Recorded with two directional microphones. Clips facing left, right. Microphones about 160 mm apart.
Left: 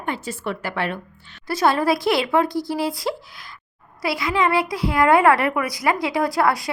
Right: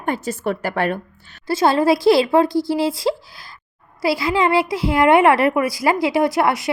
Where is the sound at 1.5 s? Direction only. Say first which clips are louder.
Right 3 dB; 25° right (ahead or behind).